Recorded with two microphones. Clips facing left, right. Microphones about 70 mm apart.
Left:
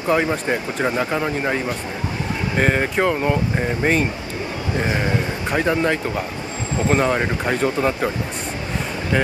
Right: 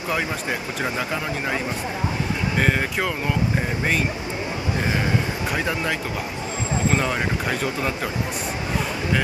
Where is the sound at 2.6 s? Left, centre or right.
Centre.